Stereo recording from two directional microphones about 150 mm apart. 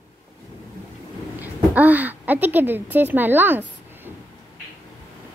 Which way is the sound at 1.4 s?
10° right (ahead or behind).